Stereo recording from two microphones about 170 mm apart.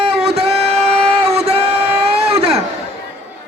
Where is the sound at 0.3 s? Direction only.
35° right (ahead or behind).